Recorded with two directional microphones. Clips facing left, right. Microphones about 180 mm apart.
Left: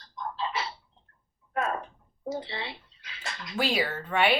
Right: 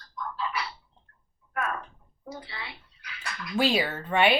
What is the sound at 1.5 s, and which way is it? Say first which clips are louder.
Speech: left 2 dB; 25° left (ahead or behind).